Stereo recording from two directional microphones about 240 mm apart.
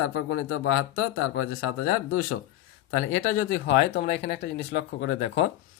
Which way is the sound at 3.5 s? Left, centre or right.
Left.